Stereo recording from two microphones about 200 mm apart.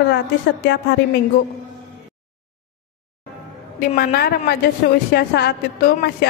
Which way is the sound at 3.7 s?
50° left (ahead or behind).